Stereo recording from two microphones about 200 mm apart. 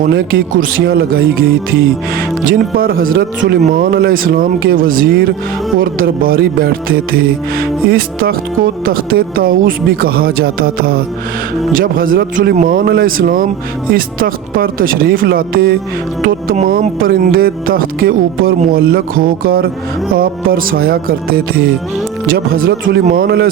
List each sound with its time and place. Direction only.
0.0 s speech: 45° right (ahead or behind)